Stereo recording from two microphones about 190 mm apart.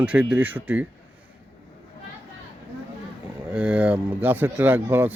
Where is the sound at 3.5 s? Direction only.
5° right (ahead or behind).